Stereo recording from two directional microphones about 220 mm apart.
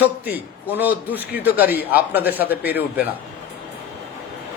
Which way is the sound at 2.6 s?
45° left (ahead or behind).